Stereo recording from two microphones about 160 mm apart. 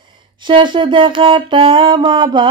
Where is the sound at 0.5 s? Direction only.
30° right (ahead or behind).